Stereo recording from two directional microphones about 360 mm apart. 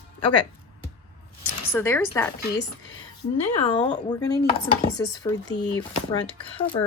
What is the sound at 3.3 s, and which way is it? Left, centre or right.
Speech, centre.